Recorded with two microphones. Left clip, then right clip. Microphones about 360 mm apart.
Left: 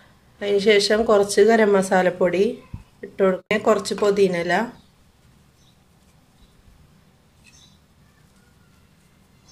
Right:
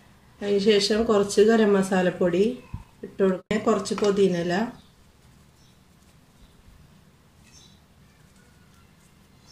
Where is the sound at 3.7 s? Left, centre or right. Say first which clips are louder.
Left 4 dB; left.